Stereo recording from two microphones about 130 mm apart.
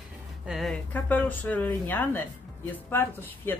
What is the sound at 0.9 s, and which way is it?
Speech, 15° left (ahead or behind).